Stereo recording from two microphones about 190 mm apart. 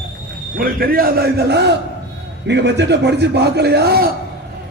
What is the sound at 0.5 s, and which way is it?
A man's voice, 50° right (ahead or behind).